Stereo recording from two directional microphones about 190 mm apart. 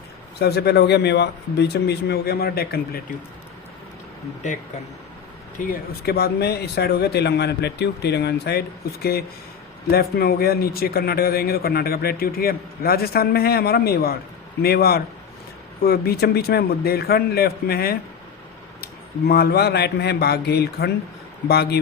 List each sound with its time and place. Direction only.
0.3 s speech: 60° left (ahead or behind)
4.4 s speech: 40° left (ahead or behind)
5.5 s speech: 50° left (ahead or behind)